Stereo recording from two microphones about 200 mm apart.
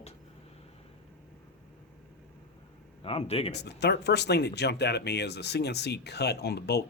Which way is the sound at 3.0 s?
30° left (ahead or behind).